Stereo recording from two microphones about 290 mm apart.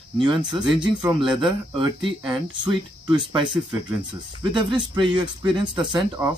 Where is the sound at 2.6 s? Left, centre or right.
Centre.